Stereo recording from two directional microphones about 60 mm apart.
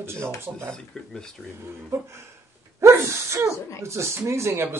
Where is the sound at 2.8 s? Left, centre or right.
Right.